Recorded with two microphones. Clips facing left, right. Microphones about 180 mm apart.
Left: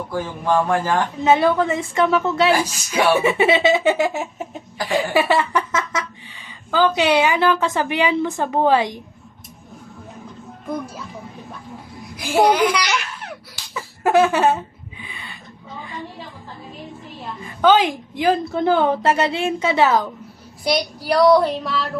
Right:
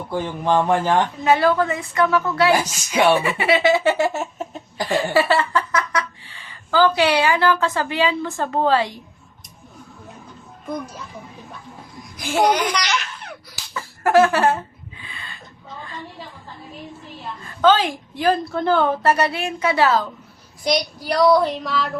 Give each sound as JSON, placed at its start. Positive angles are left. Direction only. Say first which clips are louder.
{"t": 0.1, "sound": "speech", "louder": "right 1 dB", "side_deg": -20}
{"t": 1.2, "sound": "a woman's voice", "louder": "left 4 dB", "side_deg": 20}
{"t": 12.1, "sound": "speech", "louder": "left 2 dB", "side_deg": 10}
{"t": 13.7, "sound": "a sound", "louder": "right 1 dB", "side_deg": 20}
{"t": 17.4, "sound": "a woman's voice", "louder": "left 1 dB", "side_deg": 15}
{"t": 20.7, "sound": "a woman's voice", "louder": "left 1 dB", "side_deg": 5}